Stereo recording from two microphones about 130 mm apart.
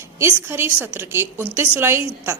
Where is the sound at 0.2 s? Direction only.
20° right (ahead or behind).